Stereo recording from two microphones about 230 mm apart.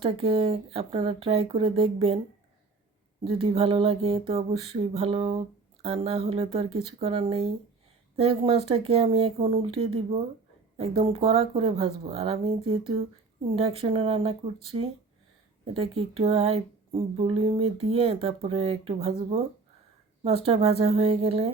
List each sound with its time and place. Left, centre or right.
0.0 s speech: right
3.4 s speech: right